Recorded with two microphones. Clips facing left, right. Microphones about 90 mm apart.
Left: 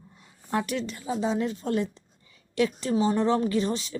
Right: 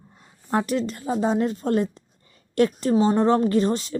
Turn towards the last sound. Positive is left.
turn(degrees=-45)  # may be behind; listen again after turning